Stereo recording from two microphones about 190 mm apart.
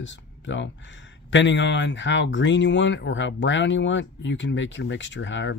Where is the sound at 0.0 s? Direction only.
75° left (ahead or behind).